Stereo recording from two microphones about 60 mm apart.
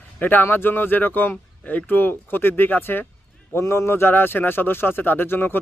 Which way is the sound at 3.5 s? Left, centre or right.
Left.